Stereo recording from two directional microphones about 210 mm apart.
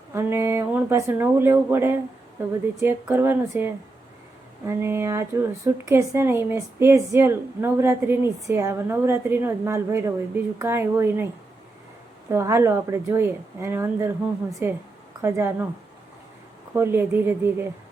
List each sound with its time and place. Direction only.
0.1 s a woman's voice: 10° right (ahead or behind)
12.3 s a woman's voice: 15° right (ahead or behind)
16.7 s a woman's voice: 10° right (ahead or behind)